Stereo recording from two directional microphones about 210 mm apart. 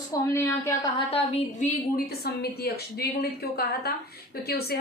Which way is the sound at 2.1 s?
50° left (ahead or behind).